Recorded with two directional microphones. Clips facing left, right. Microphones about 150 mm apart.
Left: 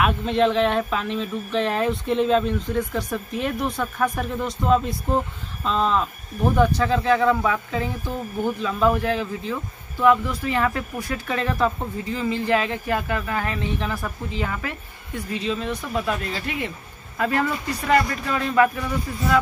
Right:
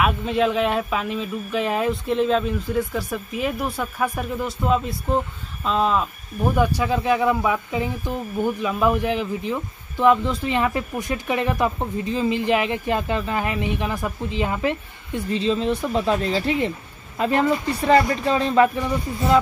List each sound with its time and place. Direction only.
0.0 s speech: 5° right (ahead or behind); by 18.7 s 25° right (ahead or behind)